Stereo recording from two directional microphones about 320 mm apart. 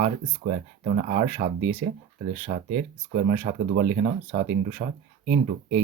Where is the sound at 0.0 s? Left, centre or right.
Right.